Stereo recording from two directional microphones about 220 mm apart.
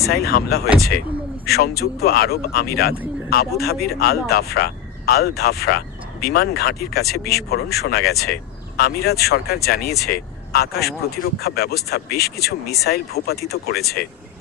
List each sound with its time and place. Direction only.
0.1 s speech: 45° left (ahead or behind)